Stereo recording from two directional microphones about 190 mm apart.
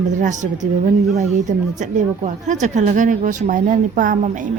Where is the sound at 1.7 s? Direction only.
40° right (ahead or behind).